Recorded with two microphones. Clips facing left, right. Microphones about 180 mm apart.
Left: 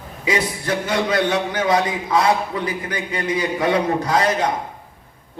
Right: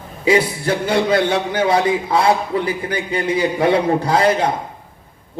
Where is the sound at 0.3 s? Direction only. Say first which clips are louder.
Right 5 dB; 30° right (ahead or behind).